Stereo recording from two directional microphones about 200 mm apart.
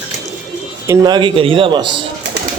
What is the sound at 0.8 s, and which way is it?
Speech, 15° right (ahead or behind).